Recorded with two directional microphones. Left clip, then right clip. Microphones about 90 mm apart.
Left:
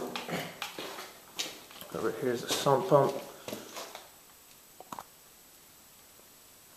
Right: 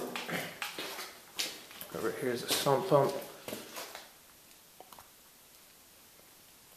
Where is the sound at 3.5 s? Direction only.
Centre (ahead or behind).